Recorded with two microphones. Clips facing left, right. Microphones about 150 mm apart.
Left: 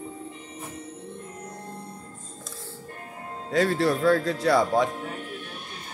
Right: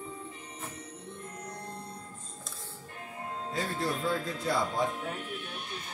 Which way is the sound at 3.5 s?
90° left.